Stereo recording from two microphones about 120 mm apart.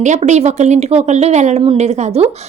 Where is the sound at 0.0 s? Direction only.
85° right.